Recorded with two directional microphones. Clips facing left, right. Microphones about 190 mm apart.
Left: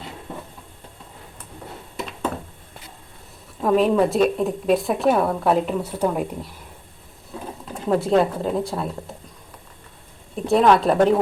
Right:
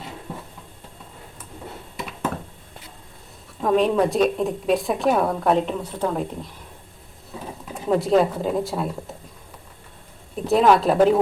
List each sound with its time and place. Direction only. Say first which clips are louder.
3.6 s a woman's voice: left 1 dB; centre (ahead or behind)
7.7 s a woman's voice: even; centre (ahead or behind)
10.4 s a woman's voice: even; centre (ahead or behind)